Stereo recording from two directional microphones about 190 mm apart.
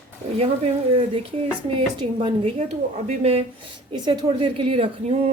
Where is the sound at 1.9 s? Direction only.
25° right (ahead or behind).